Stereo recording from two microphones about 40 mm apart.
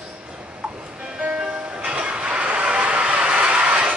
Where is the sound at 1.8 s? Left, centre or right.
Right.